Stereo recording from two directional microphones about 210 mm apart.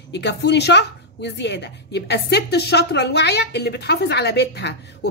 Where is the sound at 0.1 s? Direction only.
55° left (ahead or behind).